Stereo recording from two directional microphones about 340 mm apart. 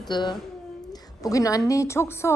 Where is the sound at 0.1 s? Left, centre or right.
Centre.